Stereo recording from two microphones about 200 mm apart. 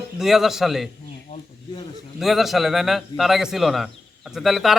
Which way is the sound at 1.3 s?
30° left (ahead or behind).